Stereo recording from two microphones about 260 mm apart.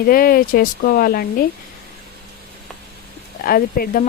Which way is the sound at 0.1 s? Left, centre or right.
Left.